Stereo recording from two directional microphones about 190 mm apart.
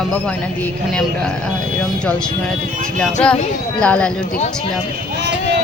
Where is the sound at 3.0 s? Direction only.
5° left (ahead or behind).